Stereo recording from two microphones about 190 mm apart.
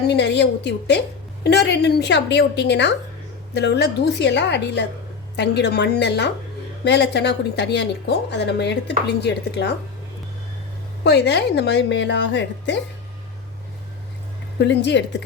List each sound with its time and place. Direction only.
0.1 s a woman's voice: 65° left (ahead or behind)
11.0 s a woman's voice: 65° left (ahead or behind)
14.6 s a woman's voice: 65° left (ahead or behind)